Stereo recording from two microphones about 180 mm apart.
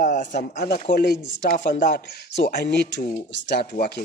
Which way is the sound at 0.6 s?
65° left (ahead or behind).